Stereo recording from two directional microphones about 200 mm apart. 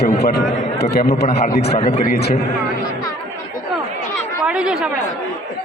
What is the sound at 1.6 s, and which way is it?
Speech, 30° left (ahead or behind).